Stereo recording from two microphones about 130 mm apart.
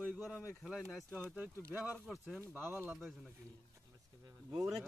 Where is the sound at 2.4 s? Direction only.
20° right (ahead or behind).